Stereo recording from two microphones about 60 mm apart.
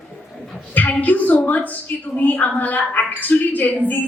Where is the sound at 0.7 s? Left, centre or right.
Left.